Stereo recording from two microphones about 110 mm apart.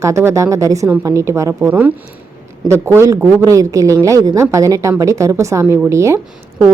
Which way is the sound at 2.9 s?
25° right (ahead or behind).